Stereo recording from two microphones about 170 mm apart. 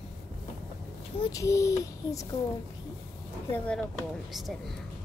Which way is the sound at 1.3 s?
20° left (ahead or behind).